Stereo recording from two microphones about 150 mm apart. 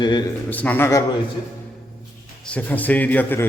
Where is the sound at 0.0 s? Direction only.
30° left (ahead or behind).